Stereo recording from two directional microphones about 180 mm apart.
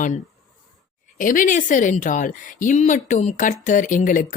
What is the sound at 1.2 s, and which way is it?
Speech, 45° left (ahead or behind).